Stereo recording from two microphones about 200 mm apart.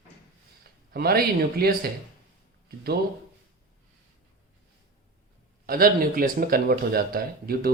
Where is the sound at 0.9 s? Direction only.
50° right (ahead or behind).